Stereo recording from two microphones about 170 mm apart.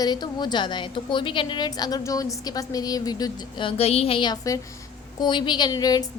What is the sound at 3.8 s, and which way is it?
A woman's voice, 35° left (ahead or behind).